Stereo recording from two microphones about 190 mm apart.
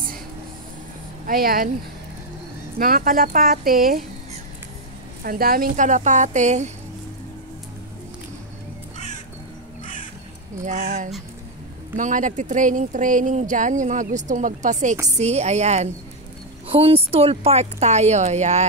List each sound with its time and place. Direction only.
1.2 s speech: 50° right (ahead or behind)
2.8 s speech: 50° right (ahead or behind)
5.2 s speech: 50° right (ahead or behind)
10.6 s speech: 40° right (ahead or behind)